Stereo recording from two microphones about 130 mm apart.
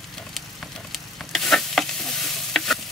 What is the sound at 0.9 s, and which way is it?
Stir, centre (ahead or behind).